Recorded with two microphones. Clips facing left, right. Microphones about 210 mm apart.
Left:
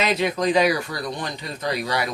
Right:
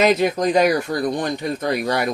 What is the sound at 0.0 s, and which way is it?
Speech, 45° right (ahead or behind).